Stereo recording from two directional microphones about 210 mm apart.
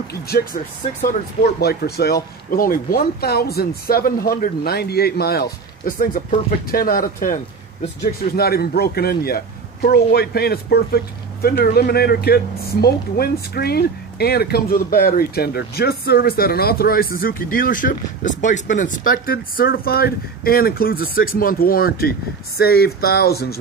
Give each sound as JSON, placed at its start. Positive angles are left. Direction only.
{"t": 0.1, "sound": "speech", "side_deg": 50}